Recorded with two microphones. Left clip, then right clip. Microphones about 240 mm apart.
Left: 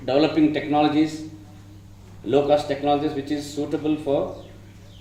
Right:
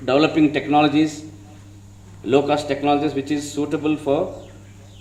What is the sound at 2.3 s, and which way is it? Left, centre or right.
A man's voice, right.